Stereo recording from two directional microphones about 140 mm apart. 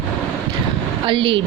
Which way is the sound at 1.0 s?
40° right (ahead or behind).